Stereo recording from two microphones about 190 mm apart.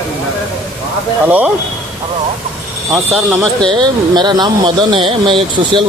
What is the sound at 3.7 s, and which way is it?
Speech, 25° right (ahead or behind).